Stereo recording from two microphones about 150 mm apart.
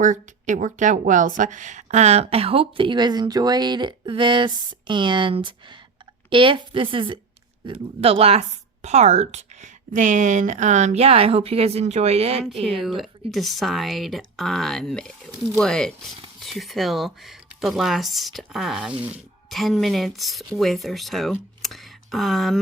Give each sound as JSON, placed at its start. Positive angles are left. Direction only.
{"t": 0.0, "sound": "a woman's voice", "side_deg": -55}
{"t": 13.0, "sound": "speech", "side_deg": 0}